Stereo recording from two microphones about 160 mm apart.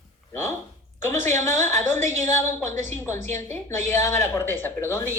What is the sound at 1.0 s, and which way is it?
A man's voice, 15° left (ahead or behind).